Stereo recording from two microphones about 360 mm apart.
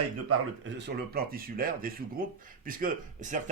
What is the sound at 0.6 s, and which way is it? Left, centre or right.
Speech, right.